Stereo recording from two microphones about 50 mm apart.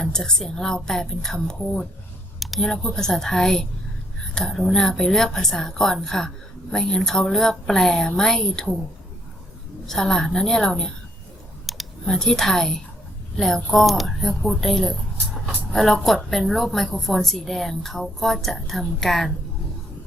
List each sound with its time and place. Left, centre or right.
0.0 s a woman's voice: centre
9.8 s a woman's voice: centre
11.7 s computer keyboard: centre
12.0 s a woman's voice: centre
13.7 s a woman's voice: centre
15.4 s a sound: centre
16.3 s a woman's voice: centre